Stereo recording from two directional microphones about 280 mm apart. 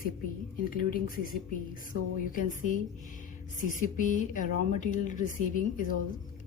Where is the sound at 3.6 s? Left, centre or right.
Left.